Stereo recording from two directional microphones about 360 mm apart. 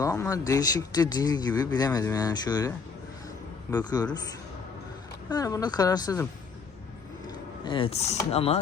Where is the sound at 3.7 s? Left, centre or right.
Centre.